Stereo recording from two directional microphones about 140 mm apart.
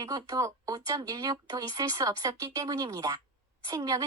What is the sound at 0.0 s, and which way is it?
A woman's voice, 25° right (ahead or behind).